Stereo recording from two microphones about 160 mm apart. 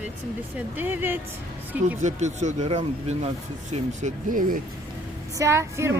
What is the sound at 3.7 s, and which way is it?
Speech, 50° right (ahead or behind).